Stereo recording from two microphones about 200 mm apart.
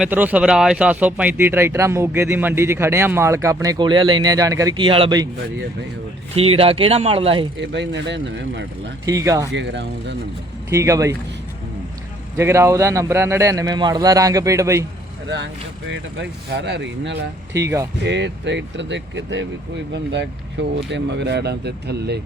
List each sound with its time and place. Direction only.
0.0 s speech: 10° right (ahead or behind)
6.3 s speech: 30° right (ahead or behind)
7.6 s speech: 60° right (ahead or behind)
9.0 s speech: 15° right (ahead or behind)
9.5 s speech: 60° right (ahead or behind)
10.7 s speech: 15° right (ahead or behind)
12.4 s speech: 15° right (ahead or behind)
15.9 s speech: 60° right (ahead or behind)
20.6 s speech: 60° right (ahead or behind)